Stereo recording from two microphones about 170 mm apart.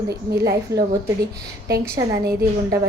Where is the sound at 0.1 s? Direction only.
70° right (ahead or behind).